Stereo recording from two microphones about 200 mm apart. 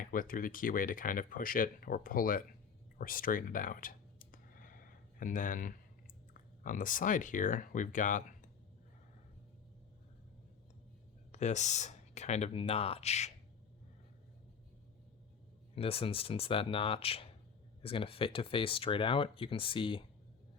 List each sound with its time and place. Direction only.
0.0 s speech: 45° left (ahead or behind)
3.0 s clicking: 45° left (ahead or behind)
6.3 s speech: 40° left (ahead or behind)
11.3 s speech: 35° left (ahead or behind)
15.7 s speech: 30° left (ahead or behind)